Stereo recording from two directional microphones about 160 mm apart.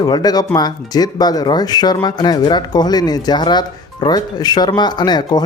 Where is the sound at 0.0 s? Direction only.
25° left (ahead or behind).